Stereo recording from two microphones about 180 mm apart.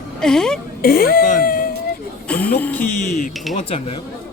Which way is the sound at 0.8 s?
55° left (ahead or behind).